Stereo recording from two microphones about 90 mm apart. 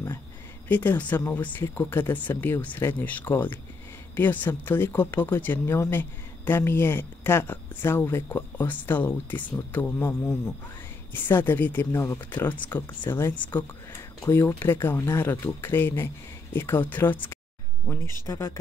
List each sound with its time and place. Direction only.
0.7 s speech: 20° left (ahead or behind)
11.1 s speech: 20° left (ahead or behind)